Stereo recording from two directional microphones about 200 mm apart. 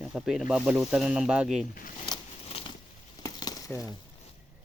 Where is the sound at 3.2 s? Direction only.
20° left (ahead or behind).